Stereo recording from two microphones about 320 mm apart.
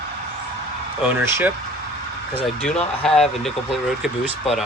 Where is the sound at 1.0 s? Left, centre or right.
Centre.